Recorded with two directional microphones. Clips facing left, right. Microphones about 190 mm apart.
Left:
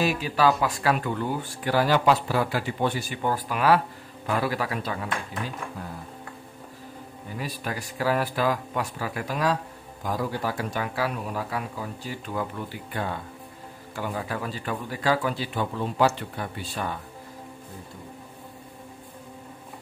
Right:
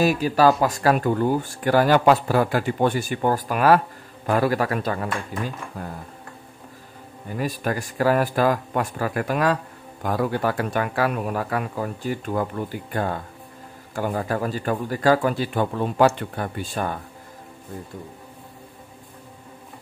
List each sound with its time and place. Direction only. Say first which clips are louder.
0.0 s speech: right 5 dB; 45° right (ahead or behind)
7.3 s speech: right 7 dB; 50° right (ahead or behind)